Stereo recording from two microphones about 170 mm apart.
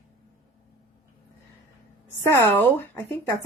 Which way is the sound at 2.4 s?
10° left (ahead or behind).